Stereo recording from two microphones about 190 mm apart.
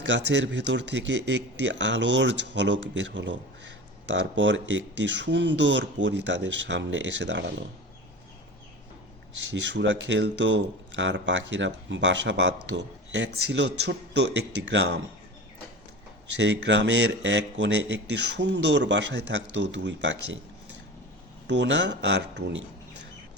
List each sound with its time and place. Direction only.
0.0 s speech: 70° right (ahead or behind)
9.6 s speech: 70° right (ahead or behind)
16.4 s speech: 70° right (ahead or behind)
21.4 s speech: 65° right (ahead or behind)